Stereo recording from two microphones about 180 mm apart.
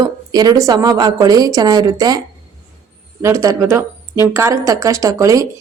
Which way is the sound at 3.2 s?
15° right (ahead or behind).